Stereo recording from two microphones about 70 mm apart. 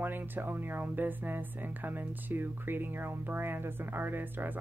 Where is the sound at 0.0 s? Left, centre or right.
Right.